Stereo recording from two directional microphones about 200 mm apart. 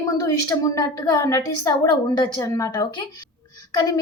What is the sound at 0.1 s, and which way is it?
A woman's voice, 15° left (ahead or behind).